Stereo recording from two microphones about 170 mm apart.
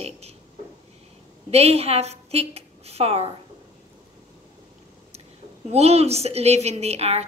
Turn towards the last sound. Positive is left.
turn(degrees=-40)  # may be behind; listen again after turning